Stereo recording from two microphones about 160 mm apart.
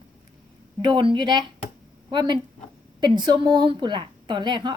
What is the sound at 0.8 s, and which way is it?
A woman's voice, 30° right (ahead or behind).